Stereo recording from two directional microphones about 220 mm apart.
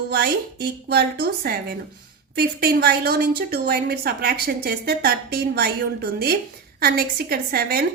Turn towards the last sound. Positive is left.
turn(degrees=-45)  # may be behind; listen again after turning